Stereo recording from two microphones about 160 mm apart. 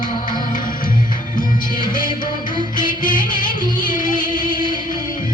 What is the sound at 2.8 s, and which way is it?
Music, 30° left (ahead or behind).